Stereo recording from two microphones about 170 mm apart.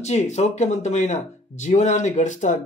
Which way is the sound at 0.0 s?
40° left (ahead or behind).